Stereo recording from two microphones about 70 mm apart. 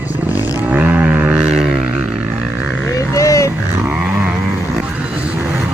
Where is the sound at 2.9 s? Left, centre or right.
Left.